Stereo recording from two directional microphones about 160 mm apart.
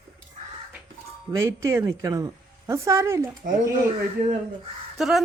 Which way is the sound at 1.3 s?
20° right (ahead or behind).